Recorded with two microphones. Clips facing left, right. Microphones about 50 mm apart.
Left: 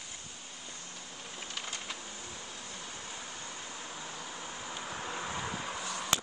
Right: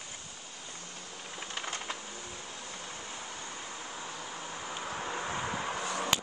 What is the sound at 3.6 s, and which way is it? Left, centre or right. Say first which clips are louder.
Vehicle: right 2 dB; centre.